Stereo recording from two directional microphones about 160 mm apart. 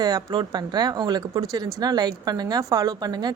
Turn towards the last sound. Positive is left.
turn(degrees=-25)  # may be behind; listen again after turning